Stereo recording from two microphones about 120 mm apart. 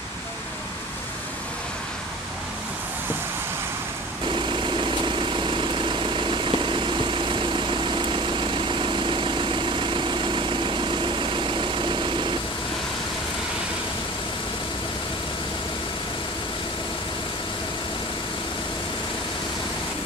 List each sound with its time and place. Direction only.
4.3 s vehicle: 40° right (ahead or behind)